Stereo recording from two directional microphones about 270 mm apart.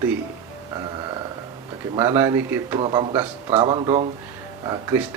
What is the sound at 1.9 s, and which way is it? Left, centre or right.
Speech, centre.